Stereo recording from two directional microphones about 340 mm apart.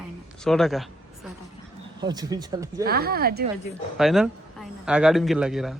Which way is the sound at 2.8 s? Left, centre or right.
Right.